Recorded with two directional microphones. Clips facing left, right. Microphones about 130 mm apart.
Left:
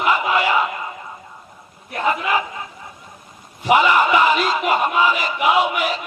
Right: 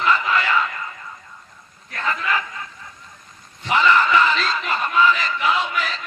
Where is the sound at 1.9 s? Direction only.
15° left (ahead or behind).